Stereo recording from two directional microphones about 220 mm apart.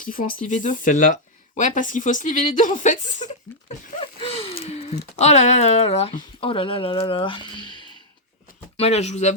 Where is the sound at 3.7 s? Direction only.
30° left (ahead or behind).